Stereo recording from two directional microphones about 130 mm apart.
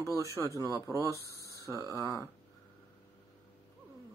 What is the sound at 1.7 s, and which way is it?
Speech, 25° right (ahead or behind).